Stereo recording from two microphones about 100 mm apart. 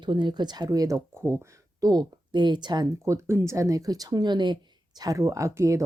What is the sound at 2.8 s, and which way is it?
Speech, 30° right (ahead or behind).